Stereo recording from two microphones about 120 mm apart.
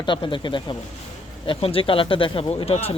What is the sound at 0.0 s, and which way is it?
Speech, 45° left (ahead or behind).